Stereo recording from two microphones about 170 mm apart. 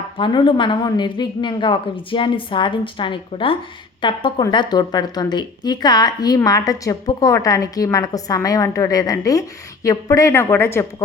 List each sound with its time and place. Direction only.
0.2 s a woman's voice: 30° left (ahead or behind)